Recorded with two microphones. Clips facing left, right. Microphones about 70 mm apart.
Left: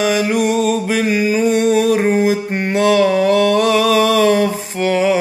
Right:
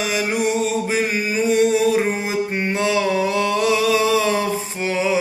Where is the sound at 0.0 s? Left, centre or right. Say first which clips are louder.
Left 5 dB; left.